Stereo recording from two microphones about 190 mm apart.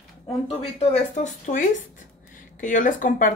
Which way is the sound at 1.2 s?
40° left (ahead or behind).